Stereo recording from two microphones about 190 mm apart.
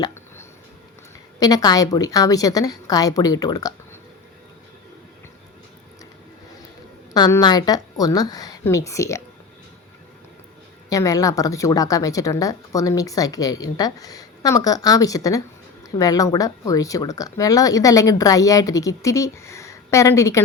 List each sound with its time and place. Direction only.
0.0 s hiccup: 15° left (ahead or behind)
1.4 s a woman's voice: 20° left (ahead or behind)
7.1 s a woman's voice: 20° left (ahead or behind)
10.8 s a woman's voice: 15° left (ahead or behind)